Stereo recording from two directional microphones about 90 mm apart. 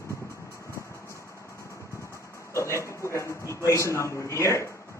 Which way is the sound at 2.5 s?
30° left (ahead or behind).